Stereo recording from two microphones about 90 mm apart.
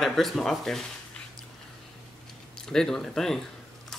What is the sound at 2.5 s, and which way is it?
Speech, 5° left (ahead or behind).